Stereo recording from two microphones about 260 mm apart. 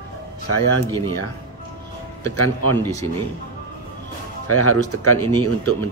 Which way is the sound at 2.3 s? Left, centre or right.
Left.